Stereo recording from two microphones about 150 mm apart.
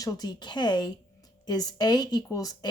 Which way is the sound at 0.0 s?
25° left (ahead or behind).